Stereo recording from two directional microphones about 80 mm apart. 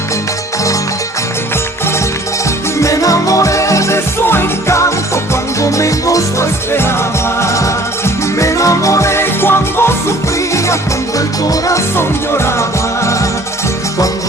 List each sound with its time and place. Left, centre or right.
2.8 s music: left